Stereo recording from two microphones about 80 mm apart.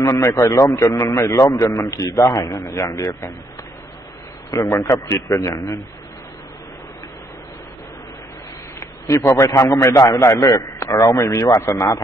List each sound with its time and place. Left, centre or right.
0.0 s a man's voice: left
4.7 s a man's voice: left
8.7 s a man's voice: left